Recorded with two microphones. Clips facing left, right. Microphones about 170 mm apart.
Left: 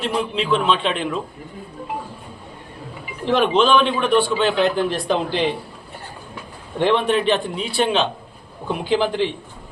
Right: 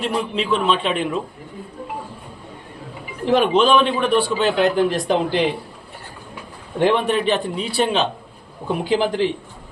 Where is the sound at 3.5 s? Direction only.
40° right (ahead or behind).